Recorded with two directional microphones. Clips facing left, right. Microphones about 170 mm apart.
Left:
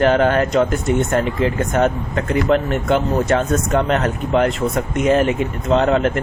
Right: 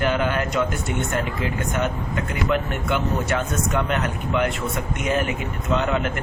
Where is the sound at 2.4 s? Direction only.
35° left (ahead or behind).